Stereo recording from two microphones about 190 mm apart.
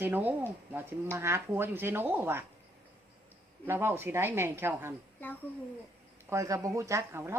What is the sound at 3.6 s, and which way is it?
Speech, 10° right (ahead or behind).